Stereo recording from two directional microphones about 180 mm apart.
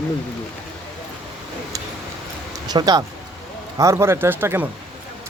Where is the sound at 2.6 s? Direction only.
20° right (ahead or behind).